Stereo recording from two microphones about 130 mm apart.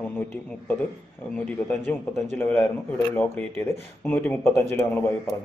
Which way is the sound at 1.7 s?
20° left (ahead or behind).